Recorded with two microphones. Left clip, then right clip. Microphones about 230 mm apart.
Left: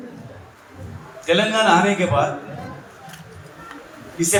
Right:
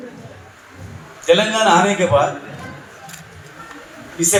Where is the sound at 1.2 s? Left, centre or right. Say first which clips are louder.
Right 3 dB; right.